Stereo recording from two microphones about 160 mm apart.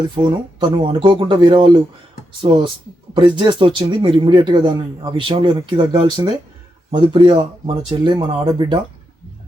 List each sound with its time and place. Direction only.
0.1 s speech: 30° right (ahead or behind)